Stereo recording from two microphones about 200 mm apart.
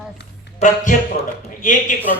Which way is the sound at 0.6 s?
40° left (ahead or behind).